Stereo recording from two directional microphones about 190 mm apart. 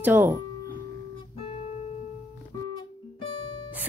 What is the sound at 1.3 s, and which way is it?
Guitar, 30° left (ahead or behind).